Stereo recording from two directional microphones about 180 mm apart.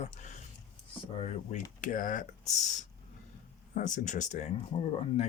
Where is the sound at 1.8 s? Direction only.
45° left (ahead or behind).